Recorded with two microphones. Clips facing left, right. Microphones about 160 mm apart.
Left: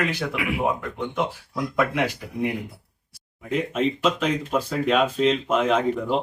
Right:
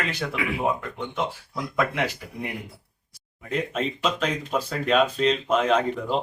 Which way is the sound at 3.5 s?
5° left (ahead or behind).